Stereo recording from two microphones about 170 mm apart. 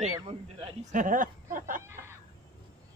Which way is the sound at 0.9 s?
50° right (ahead or behind).